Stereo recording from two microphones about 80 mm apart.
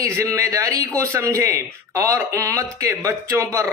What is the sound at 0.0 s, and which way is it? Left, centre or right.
Speech, right.